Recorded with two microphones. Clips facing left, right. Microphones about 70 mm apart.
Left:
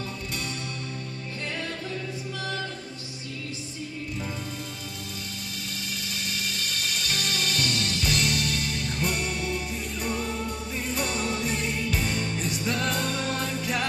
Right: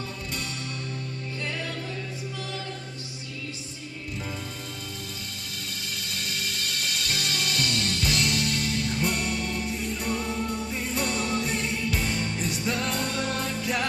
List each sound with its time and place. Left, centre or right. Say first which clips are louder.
7.1 s music: left 1 dB; centre